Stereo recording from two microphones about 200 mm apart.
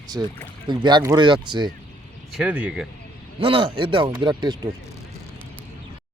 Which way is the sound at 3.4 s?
25° right (ahead or behind).